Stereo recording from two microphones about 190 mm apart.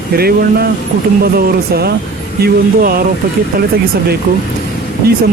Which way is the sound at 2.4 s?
50° right (ahead or behind).